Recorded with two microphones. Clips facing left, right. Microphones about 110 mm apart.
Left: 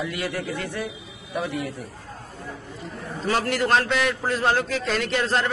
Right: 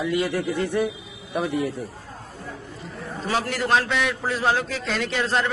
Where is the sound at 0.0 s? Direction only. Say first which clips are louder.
Right 5 dB; 20° right (ahead or behind).